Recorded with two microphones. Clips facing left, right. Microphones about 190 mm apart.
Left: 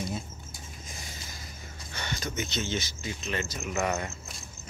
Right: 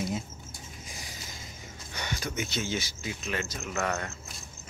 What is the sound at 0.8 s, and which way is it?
Vehicle, 10° right (ahead or behind).